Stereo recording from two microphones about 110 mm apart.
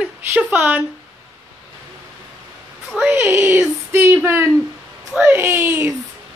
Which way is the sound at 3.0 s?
15° right (ahead or behind).